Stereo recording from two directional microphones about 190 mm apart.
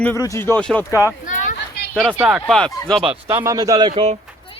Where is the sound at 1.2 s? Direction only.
45° left (ahead or behind).